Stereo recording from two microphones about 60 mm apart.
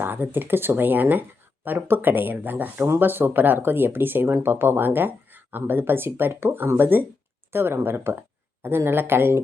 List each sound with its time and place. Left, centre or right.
0.0 s speech: right